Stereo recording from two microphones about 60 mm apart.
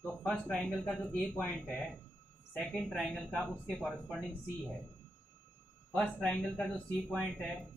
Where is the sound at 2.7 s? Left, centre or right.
Centre.